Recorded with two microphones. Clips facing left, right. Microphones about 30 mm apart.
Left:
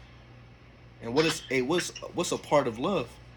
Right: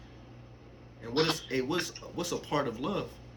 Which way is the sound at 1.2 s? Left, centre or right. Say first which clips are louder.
Left 3 dB; left.